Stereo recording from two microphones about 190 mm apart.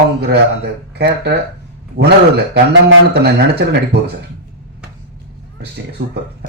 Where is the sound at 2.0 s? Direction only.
80° right.